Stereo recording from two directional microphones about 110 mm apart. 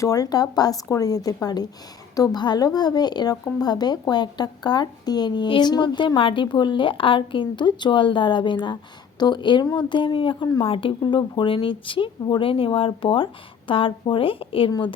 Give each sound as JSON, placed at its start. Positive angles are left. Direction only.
{"t": 0.0, "sound": "a woman's voice", "side_deg": 35}